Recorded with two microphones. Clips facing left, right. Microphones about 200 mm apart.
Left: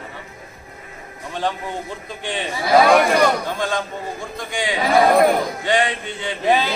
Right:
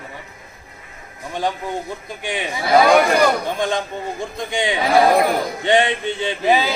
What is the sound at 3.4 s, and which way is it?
Speech, 20° right (ahead or behind).